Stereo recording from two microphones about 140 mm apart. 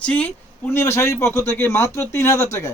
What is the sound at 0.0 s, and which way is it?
Speech, 10° left (ahead or behind).